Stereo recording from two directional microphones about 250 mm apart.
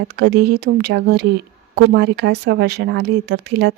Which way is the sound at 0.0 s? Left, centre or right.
Right.